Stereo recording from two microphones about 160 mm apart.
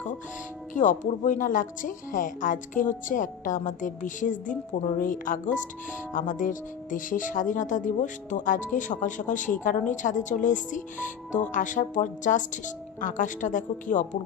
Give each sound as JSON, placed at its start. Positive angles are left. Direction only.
{"t": 0.7, "sound": "speech", "side_deg": 50}